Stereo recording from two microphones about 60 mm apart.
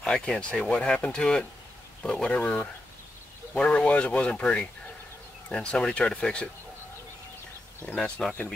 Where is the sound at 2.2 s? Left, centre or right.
Left.